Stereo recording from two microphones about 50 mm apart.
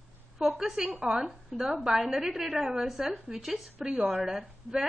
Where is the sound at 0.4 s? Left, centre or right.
Centre.